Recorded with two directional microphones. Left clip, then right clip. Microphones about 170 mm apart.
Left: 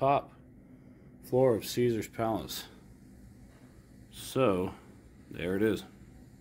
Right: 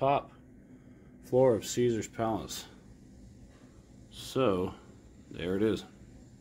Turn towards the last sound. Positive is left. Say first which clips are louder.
# even
turn(degrees=0)  # may be behind; listen again after turning